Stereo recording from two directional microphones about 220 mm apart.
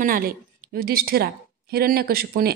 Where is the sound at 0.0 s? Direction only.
40° right (ahead or behind).